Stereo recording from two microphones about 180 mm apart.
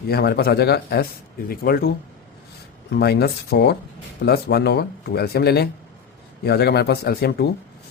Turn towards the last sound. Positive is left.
turn(degrees=60)  # may be behind; listen again after turning